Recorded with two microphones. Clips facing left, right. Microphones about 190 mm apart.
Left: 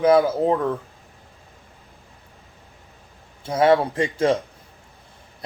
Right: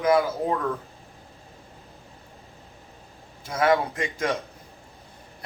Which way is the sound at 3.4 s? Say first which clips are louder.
Left 5 dB; 30° left (ahead or behind).